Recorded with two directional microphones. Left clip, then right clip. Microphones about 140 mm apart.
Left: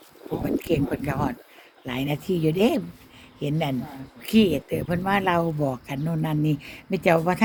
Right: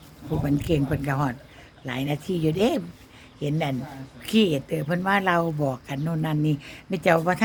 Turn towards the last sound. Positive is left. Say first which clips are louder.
# even
turn(degrees=-5)  # may be behind; listen again after turning